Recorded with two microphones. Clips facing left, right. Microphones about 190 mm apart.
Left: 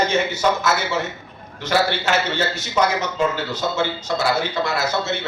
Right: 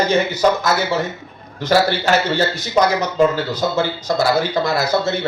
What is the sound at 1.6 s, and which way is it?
A man's voice, 35° right (ahead or behind).